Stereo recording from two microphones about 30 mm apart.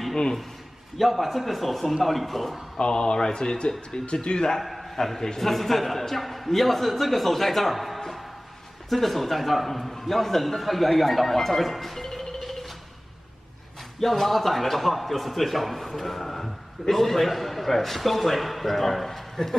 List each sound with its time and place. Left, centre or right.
0.1 s a man's voice: centre
0.9 s a man's voice: centre
2.8 s speech: left
4.6 s a man's voice: centre
9.7 s a sound: centre
9.9 s speech: centre
13.9 s a man's voice: centre